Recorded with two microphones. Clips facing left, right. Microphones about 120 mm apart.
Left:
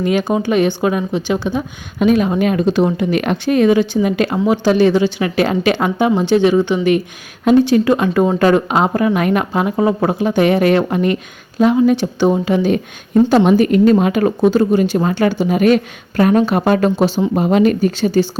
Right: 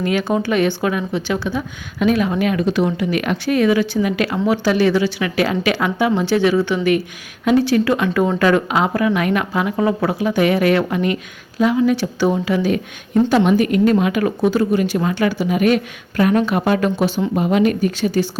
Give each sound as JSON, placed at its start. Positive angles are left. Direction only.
{"t": 0.0, "sound": "speech", "side_deg": 20}
{"t": 5.2, "sound": "speech", "side_deg": 35}